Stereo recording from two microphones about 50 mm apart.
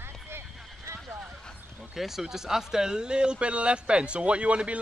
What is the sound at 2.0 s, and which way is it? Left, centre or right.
Speech, centre.